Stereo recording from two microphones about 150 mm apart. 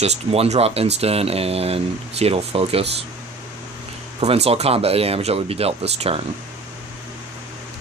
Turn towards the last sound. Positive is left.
turn(degrees=-45)  # may be behind; listen again after turning